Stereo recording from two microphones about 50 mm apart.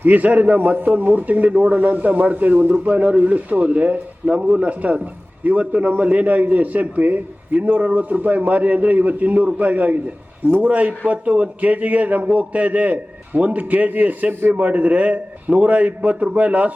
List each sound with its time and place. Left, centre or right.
0.0 s a man's voice: right